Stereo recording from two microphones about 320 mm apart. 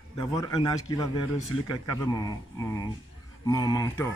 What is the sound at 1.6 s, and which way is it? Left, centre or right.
Speech, left.